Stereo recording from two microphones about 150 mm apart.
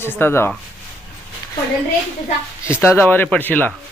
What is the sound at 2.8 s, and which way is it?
Speech, 15° left (ahead or behind).